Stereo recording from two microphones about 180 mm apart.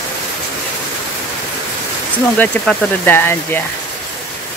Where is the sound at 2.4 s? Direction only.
10° left (ahead or behind).